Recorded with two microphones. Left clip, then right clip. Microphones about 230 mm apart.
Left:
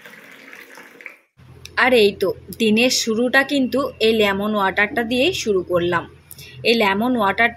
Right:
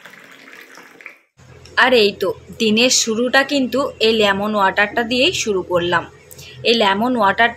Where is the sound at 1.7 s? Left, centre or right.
Left.